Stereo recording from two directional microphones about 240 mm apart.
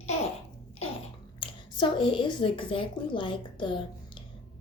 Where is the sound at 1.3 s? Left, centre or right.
Centre.